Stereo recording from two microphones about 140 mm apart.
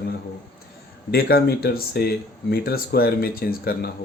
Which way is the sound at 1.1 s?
90° left.